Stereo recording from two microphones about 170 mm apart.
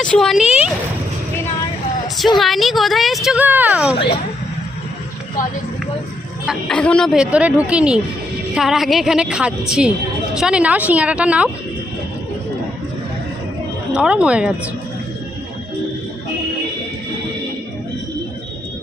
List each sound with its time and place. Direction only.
0.0 s speech: 5° left (ahead or behind)
2.1 s speech: centre (ahead or behind)
3.9 s speech: 30° left (ahead or behind)
6.4 s a woman's voice: centre (ahead or behind)
13.9 s a woman's voice: 5° right (ahead or behind)